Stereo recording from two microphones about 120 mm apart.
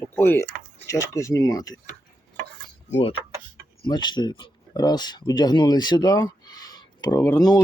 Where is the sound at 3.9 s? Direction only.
40° left (ahead or behind).